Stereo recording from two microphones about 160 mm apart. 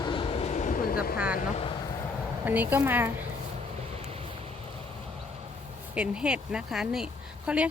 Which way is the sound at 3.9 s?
40° right (ahead or behind).